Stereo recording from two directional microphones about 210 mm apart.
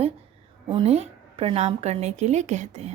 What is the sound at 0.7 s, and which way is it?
Speech, 25° right (ahead or behind).